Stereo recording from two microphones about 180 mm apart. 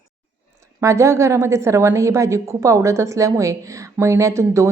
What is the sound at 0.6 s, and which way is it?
A woman's voice, 15° right (ahead or behind).